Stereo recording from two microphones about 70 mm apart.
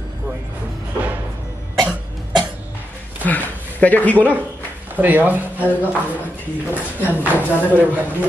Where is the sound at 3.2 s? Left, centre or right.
Left.